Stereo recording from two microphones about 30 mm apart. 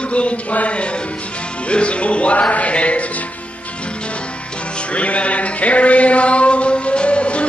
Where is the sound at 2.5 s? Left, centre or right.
Left.